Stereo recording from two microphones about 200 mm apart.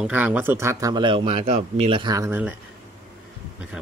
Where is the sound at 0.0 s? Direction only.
10° right (ahead or behind).